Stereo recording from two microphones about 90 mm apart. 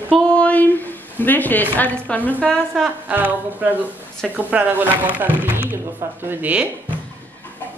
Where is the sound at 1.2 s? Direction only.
20° left (ahead or behind).